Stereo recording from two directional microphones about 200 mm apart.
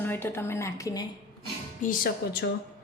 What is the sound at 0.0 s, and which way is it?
A woman's voice, 10° left (ahead or behind).